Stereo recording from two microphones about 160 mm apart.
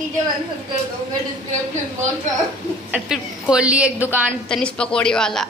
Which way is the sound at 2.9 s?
5° right (ahead or behind).